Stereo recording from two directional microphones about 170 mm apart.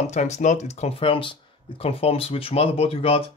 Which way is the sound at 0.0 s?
40° left (ahead or behind).